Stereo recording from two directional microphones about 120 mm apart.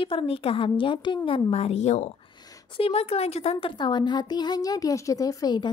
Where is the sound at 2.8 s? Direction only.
55° left (ahead or behind).